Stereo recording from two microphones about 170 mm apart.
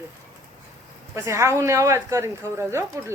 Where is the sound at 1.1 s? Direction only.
15° right (ahead or behind).